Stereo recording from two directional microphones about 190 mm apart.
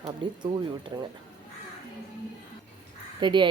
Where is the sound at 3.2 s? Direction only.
25° right (ahead or behind).